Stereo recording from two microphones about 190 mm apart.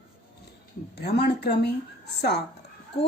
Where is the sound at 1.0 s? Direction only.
60° left (ahead or behind).